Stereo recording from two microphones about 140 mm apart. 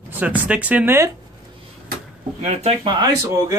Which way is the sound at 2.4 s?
50° right (ahead or behind).